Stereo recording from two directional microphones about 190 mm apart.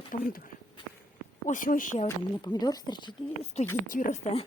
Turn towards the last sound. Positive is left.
turn(degrees=35)  # may be behind; listen again after turning